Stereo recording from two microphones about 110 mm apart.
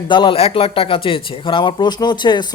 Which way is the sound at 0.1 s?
50° left (ahead or behind).